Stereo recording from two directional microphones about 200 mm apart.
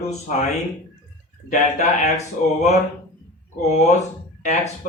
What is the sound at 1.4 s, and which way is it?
Speech, 35° left (ahead or behind).